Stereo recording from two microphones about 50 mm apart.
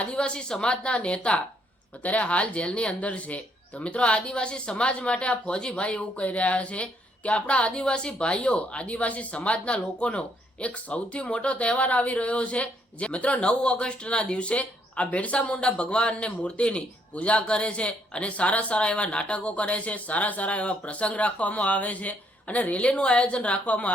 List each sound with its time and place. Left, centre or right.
0.0 s speech: left